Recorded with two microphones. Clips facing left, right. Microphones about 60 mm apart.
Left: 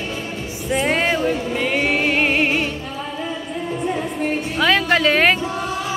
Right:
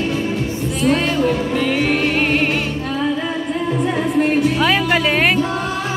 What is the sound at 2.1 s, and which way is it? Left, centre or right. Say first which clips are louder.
Music: right 1 dB; centre.